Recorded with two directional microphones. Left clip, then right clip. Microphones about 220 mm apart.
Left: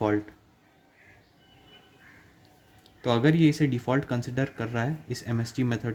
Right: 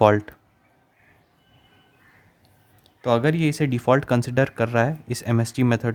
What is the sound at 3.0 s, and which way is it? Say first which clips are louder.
Speech: right 2 dB; 25° right (ahead or behind).